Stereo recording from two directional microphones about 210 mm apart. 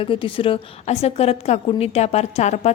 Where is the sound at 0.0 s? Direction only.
25° left (ahead or behind).